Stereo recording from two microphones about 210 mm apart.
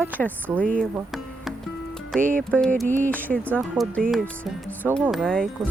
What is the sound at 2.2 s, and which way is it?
Speech, 40° right (ahead or behind).